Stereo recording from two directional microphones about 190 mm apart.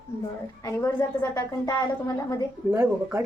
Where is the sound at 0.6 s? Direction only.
15° left (ahead or behind).